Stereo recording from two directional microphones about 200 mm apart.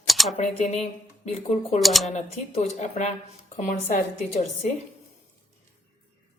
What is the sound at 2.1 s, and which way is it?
A woman's voice, 30° left (ahead or behind).